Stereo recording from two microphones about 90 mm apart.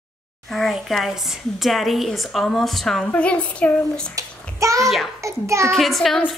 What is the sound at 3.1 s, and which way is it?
A child's voice, 15° left (ahead or behind).